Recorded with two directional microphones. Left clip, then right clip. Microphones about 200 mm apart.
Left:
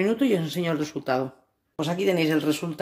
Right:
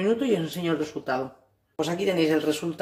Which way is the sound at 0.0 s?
45° left (ahead or behind).